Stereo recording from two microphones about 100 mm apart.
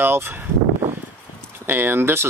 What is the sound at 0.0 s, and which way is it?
Speech, 25° right (ahead or behind).